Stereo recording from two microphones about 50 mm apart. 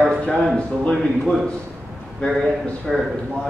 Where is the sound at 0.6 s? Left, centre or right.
Left.